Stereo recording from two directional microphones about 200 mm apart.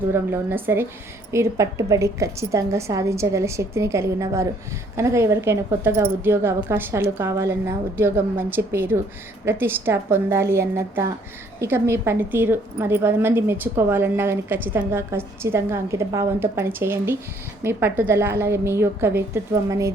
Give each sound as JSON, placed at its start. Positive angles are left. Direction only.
{"t": 0.1, "sound": "a woman's voice", "side_deg": -10}